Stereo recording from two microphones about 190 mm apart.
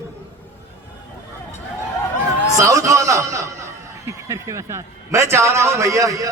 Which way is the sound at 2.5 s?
15° right (ahead or behind).